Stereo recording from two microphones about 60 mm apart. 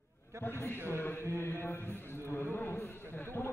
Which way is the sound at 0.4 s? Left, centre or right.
Left.